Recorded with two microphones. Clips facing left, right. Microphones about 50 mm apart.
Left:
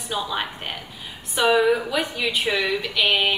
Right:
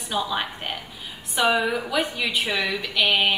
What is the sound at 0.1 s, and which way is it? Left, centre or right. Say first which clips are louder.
A woman's voice: right 1 dB; centre.